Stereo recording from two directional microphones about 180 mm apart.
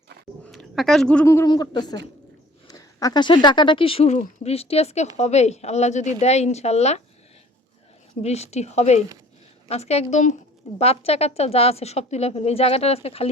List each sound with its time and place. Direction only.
0.4 s a sound: 5° left (ahead or behind)
1.2 s a woman's voice: 15° left (ahead or behind); by 7.0 s 35° left (ahead or behind)
8.2 s speech: 35° left (ahead or behind)